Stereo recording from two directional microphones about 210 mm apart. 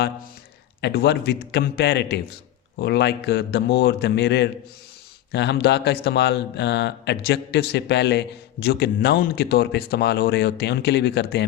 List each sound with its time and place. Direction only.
0.8 s speech: 50° left (ahead or behind)